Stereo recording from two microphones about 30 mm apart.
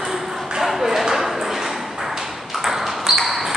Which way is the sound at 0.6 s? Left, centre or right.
Centre.